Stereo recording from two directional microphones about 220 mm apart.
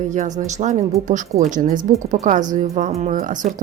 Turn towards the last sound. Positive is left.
turn(degrees=-35)  # may be behind; listen again after turning